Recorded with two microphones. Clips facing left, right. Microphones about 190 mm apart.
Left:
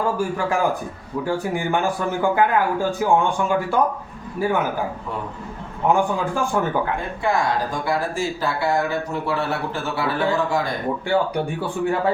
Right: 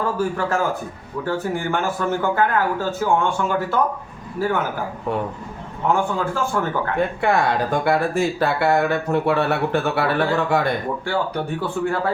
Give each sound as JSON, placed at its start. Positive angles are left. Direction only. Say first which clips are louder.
{"t": 0.3, "sound": "speech", "louder": "left 1 dB", "side_deg": 15}
{"t": 5.9, "sound": "speech", "louder": "left 1 dB", "side_deg": 15}
{"t": 7.2, "sound": "speech", "louder": "even", "side_deg": -65}
{"t": 11.0, "sound": "speech", "louder": "left 3 dB", "side_deg": 15}